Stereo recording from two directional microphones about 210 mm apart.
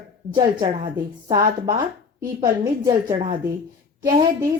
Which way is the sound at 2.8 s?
15° right (ahead or behind).